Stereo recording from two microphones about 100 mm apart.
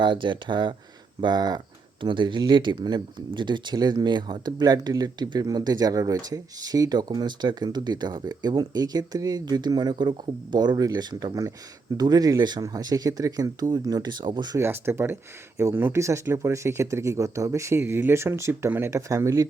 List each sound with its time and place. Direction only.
0.0 s speech: 50° right (ahead or behind)
14.6 s speech: 25° right (ahead or behind)